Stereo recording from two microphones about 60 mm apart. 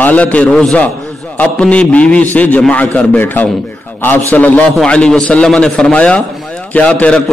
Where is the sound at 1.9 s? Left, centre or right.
Left.